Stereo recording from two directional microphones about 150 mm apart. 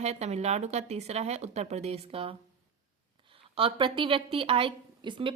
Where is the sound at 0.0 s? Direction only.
45° right (ahead or behind).